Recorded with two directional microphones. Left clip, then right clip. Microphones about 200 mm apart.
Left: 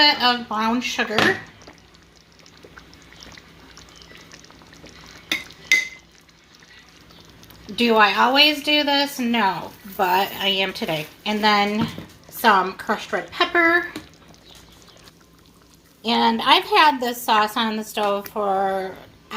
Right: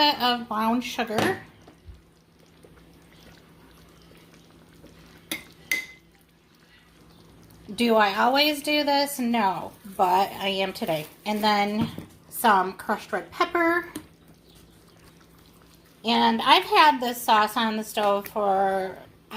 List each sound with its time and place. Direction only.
0.0 s a woman's voice: 15° right (ahead or behind)
7.8 s a woman's voice: 10° right (ahead or behind)
16.0 s a woman's voice: centre (ahead or behind)